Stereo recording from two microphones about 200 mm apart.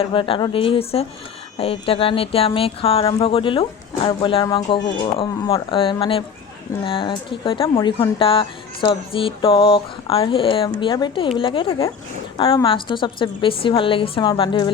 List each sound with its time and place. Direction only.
0.0 s speech: 25° left (ahead or behind)